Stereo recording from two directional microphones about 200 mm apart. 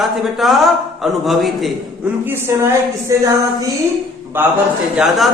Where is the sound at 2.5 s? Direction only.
15° right (ahead or behind).